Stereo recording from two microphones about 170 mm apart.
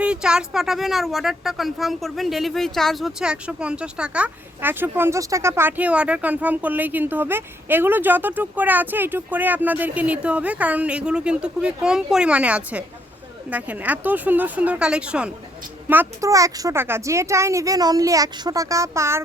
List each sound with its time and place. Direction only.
0.0 s speech: 5° right (ahead or behind)